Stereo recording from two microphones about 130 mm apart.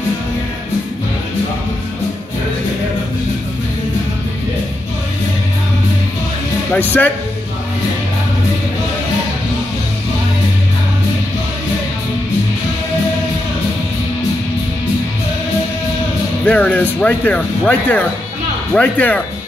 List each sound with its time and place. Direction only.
6.7 s speech: 15° left (ahead or behind)
16.4 s speech: 15° left (ahead or behind)